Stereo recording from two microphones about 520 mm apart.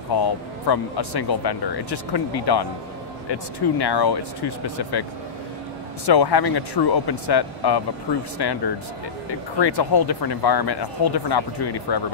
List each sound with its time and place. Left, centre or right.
0.1 s speech: left
6.0 s speech: left